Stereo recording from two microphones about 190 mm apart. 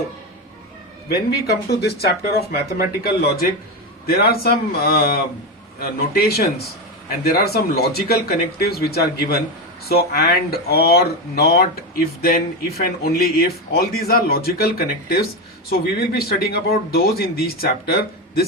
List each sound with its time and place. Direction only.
1.0 s speech: 55° left (ahead or behind)